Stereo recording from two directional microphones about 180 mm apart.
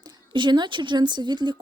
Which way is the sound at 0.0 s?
25° right (ahead or behind).